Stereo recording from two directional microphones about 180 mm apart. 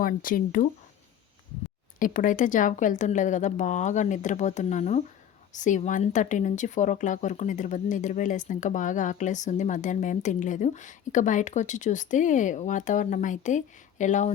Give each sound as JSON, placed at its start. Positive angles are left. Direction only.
{"t": 0.0, "sound": "speech", "side_deg": 50}
{"t": 2.0, "sound": "speech", "side_deg": 50}